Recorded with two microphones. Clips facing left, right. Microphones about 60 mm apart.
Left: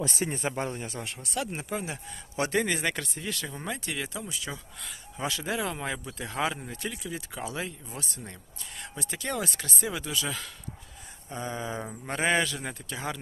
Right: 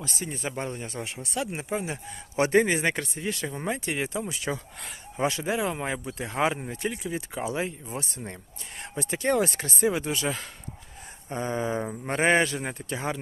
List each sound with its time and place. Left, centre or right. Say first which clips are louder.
0.3 s speech: left 1 dB; centre
2.3 s speech: right 6 dB; right
4.2 s speech: right 6 dB; right
5.4 s speech: right 3 dB; centre
11.8 s speech: right 5 dB; centre
12.1 s speech: right 4 dB; right